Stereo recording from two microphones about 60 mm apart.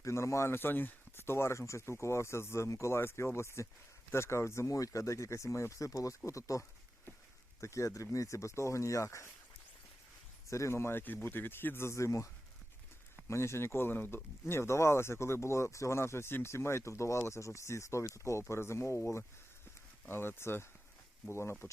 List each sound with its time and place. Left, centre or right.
0.0 s speech: left
10.5 s speech: left
11.0 s speech: left
14.4 s speech: left
20.1 s speech: left